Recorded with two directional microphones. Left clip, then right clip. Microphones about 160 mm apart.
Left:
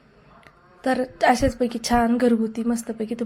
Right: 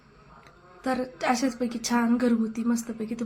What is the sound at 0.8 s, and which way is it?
A woman's voice, 25° left (ahead or behind).